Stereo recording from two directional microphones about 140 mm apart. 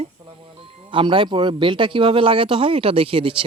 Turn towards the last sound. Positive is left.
turn(degrees=-40)  # may be behind; listen again after turning